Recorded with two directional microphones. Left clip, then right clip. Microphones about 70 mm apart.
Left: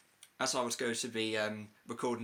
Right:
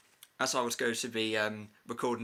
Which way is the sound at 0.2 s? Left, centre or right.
Right.